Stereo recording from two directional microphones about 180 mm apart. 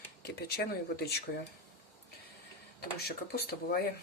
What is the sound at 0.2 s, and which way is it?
Speech, 60° left (ahead or behind).